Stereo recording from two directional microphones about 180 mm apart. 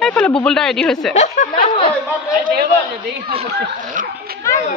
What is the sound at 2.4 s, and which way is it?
Speech, 60° right (ahead or behind).